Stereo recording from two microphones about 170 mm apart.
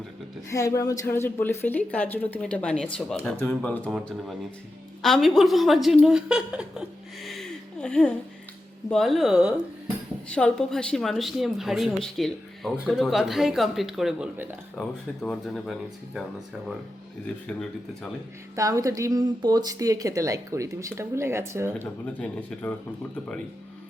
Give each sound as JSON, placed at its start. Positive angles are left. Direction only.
{"t": 0.5, "sound": "a woman's voice", "side_deg": 20}
{"t": 5.0, "sound": "a woman's voice", "side_deg": 0}
{"t": 10.2, "sound": "a woman's voice", "side_deg": 5}
{"t": 15.2, "sound": "a woman's voice", "side_deg": 5}
{"t": 17.2, "sound": "a woman's voice", "side_deg": 5}
{"t": 18.5, "sound": "speech", "side_deg": -20}
{"t": 22.0, "sound": "a woman's voice", "side_deg": 10}